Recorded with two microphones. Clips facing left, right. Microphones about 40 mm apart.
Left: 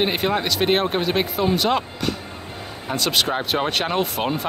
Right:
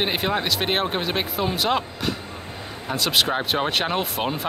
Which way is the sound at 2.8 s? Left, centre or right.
Centre.